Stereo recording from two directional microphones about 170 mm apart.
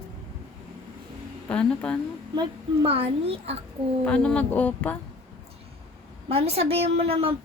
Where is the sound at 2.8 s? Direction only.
35° right (ahead or behind).